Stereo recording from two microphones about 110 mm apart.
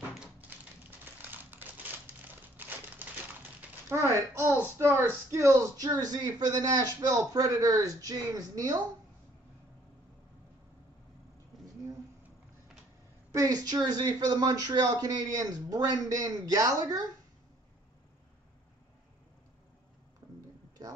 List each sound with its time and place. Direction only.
0.2 s a sound: 15° right (ahead or behind)
1.1 s crumpling: 15° right (ahead or behind)
3.9 s speech: 25° right (ahead or behind)
13.3 s speech: 35° right (ahead or behind)
20.8 s speech: 35° right (ahead or behind)